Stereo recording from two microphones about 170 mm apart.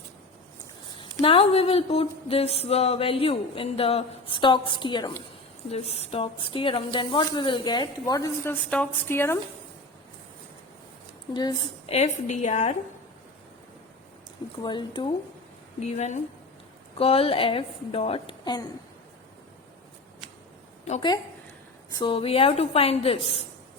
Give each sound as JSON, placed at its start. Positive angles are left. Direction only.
{"t": 1.2, "sound": "speech", "side_deg": 30}
{"t": 5.7, "sound": "speech", "side_deg": 35}
{"t": 11.3, "sound": "speech", "side_deg": 25}
{"t": 11.9, "sound": "a woman's voice", "side_deg": 40}
{"t": 14.5, "sound": "speech", "side_deg": 25}
{"t": 15.8, "sound": "a woman's voice", "side_deg": 40}
{"t": 21.9, "sound": "speech", "side_deg": 30}